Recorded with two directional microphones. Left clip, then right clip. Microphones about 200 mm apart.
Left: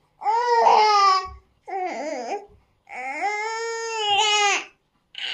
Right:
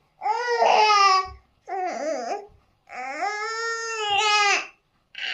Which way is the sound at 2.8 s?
10° right (ahead or behind).